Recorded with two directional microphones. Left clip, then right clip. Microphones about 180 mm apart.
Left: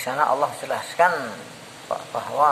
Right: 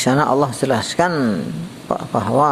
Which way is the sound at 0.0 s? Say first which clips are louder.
Right 5 dB; 30° right (ahead or behind).